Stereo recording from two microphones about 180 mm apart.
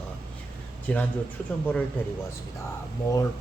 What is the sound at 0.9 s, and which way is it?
Speech, 10° left (ahead or behind).